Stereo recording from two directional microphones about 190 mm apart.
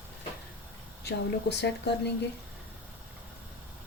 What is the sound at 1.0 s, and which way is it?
Speech, 60° left (ahead or behind).